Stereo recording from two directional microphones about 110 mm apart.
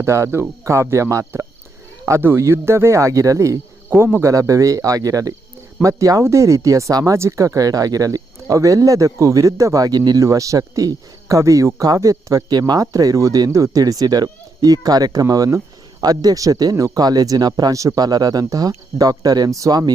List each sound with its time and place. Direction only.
0.0 s speech: 25° right (ahead or behind)